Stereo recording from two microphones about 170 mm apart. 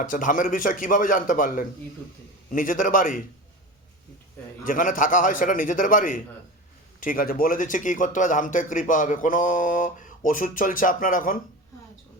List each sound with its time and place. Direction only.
0.0 s speech: 50° left (ahead or behind)
4.6 s speech: 50° left (ahead or behind)